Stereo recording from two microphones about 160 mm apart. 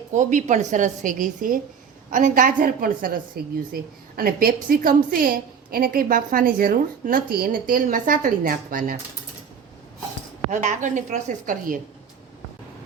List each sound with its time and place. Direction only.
0.1 s a woman's voice: 50° right (ahead or behind)
10.5 s a woman's voice: 50° right (ahead or behind)